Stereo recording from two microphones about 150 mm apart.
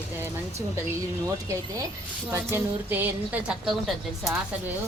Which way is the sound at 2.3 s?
15° right (ahead or behind).